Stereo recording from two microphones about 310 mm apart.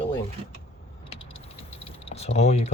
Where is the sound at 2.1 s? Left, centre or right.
Centre.